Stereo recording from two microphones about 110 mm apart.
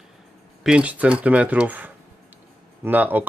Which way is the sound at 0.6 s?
10° right (ahead or behind).